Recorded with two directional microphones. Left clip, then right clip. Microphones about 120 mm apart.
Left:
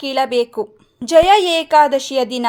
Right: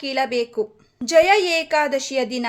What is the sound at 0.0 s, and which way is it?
A woman's voice, 35° left (ahead or behind).